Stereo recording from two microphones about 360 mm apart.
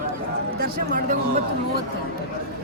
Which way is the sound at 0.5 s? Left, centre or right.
Right.